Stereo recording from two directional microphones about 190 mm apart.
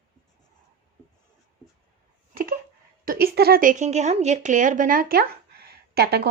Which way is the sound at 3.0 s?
55° right (ahead or behind).